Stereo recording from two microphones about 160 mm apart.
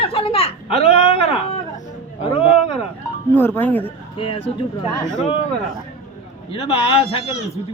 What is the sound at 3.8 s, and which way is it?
Speech, 35° left (ahead or behind).